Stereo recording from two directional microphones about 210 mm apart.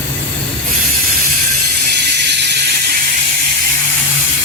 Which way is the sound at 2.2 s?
55° right (ahead or behind).